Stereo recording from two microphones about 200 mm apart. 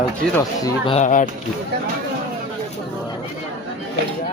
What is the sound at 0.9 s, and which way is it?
Speech, 40° left (ahead or behind).